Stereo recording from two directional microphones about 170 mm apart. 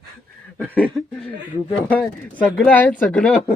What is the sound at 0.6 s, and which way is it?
Speech, 10° left (ahead or behind).